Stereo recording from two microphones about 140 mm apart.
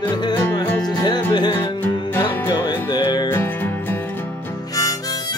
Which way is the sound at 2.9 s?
30° left (ahead or behind).